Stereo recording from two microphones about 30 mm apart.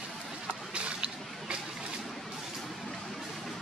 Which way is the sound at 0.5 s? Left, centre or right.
Right.